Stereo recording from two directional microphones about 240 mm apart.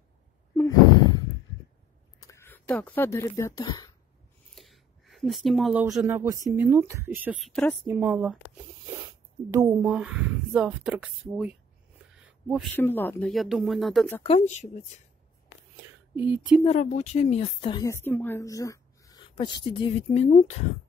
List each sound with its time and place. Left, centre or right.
0.6 s sigh: centre
2.1 s speech: centre
4.6 s a woman's voice: centre
9.5 s speech: centre
12.3 s a sound: centre
12.7 s speech: centre
14.2 s speech: left
16.2 s speech: centre
16.6 s a woman's voice: left